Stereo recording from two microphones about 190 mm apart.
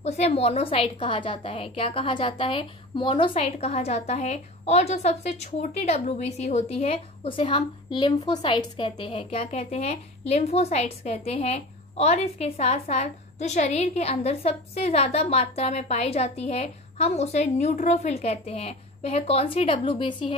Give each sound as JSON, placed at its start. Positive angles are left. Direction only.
{"t": 0.0, "sound": "a woman's voice", "side_deg": 30}